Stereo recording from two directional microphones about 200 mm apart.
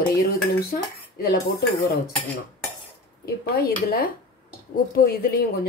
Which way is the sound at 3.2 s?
50° left (ahead or behind).